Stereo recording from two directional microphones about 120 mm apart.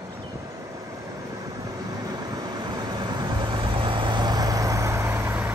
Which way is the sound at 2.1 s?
35° right (ahead or behind).